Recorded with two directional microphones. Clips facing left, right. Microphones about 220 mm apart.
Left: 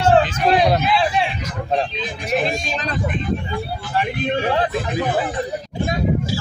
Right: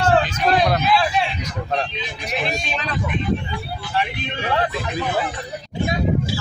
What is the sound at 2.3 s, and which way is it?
Speech, 45° left (ahead or behind).